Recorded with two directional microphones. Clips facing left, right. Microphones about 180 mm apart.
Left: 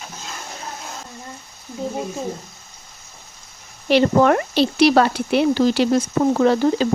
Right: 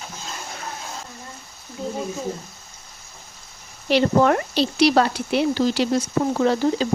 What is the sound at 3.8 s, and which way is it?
Speech, 65° left (ahead or behind).